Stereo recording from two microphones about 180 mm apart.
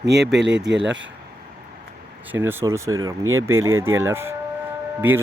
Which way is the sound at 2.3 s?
15° right (ahead or behind).